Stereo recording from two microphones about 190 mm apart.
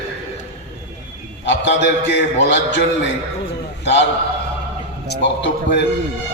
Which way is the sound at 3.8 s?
70° left (ahead or behind).